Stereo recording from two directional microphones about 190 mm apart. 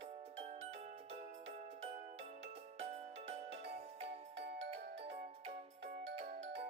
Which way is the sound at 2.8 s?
35° right (ahead or behind).